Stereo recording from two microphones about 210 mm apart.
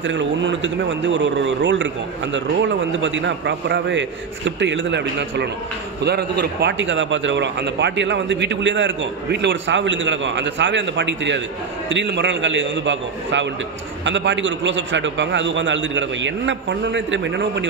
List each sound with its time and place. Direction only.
0.0 s a man's voice: 60° right (ahead or behind)